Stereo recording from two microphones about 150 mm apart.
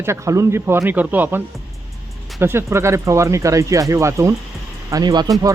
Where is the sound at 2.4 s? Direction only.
15° right (ahead or behind).